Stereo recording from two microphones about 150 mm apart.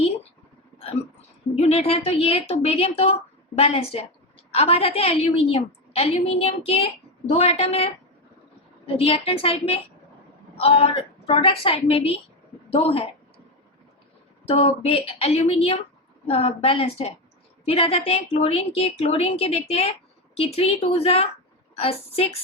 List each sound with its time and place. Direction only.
1.5 s a woman's voice: 45° left (ahead or behind)
8.9 s a woman's voice: 40° left (ahead or behind)
14.4 s a woman's voice: 40° left (ahead or behind)